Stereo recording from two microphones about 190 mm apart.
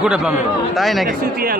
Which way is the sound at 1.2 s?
50° right (ahead or behind).